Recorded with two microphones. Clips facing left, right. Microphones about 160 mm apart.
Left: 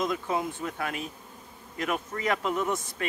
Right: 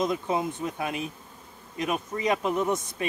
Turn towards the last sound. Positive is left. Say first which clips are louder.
# right 3 dB
turn(degrees=-20)  # may be behind; listen again after turning